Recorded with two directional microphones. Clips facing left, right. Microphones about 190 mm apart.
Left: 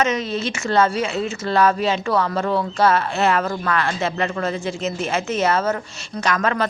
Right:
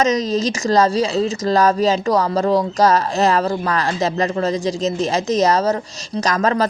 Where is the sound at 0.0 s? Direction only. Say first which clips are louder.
Right 4 dB; 40° right (ahead or behind).